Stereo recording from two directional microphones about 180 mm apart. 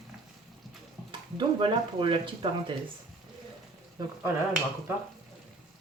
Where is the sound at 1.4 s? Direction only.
25° right (ahead or behind).